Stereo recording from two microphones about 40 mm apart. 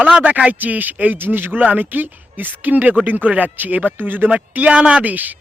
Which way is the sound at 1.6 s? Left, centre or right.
Right.